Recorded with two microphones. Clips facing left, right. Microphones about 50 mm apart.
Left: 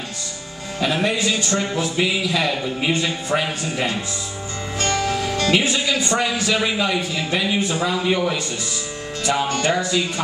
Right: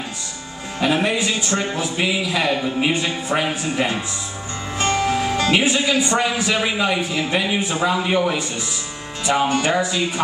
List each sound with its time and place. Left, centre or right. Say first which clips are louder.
0.7 s speech: right 2 dB; centre